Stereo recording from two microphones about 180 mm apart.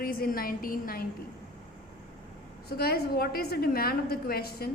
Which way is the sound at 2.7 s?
60° left (ahead or behind).